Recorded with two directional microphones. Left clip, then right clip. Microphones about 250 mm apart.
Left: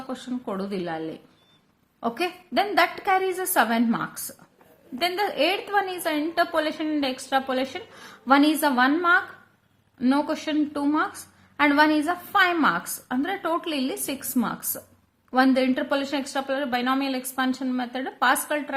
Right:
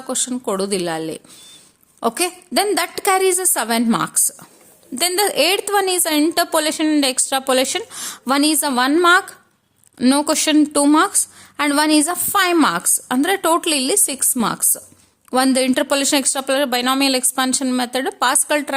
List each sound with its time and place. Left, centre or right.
0.1 s a woman's voice: right